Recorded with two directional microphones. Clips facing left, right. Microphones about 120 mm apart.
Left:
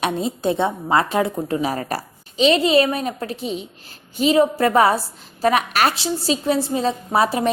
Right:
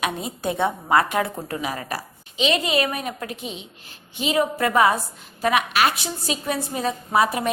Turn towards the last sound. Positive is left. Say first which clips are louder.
# left 2 dB
turn(degrees=30)  # may be behind; listen again after turning